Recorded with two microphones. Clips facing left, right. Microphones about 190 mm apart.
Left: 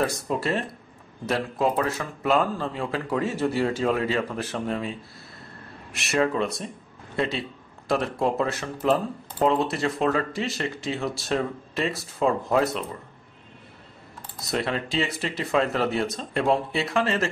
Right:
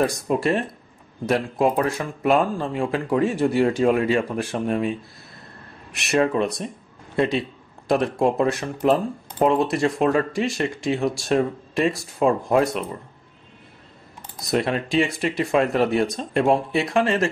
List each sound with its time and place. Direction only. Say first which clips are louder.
0.0 s speech: right 5 dB; 15° right (ahead or behind)
5.9 s speech: right 3 dB; 20° right (ahead or behind)
14.5 s speech: right 5 dB; 15° right (ahead or behind)